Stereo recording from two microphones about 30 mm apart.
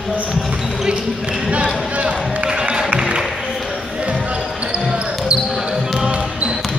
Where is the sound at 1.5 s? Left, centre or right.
Right.